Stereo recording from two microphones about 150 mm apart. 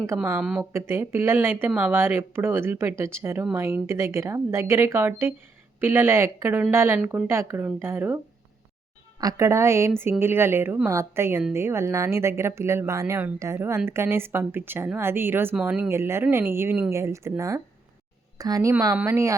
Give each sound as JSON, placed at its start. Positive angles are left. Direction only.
{"t": 0.4, "sound": "speech", "side_deg": -5}
{"t": 0.7, "sound": "speech", "side_deg": -15}
{"t": 9.2, "sound": "a woman's voice", "side_deg": -20}